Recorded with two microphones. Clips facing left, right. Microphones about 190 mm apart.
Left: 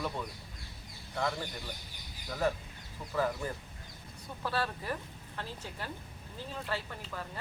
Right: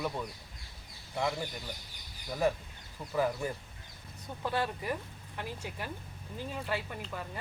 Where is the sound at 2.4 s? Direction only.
10° right (ahead or behind).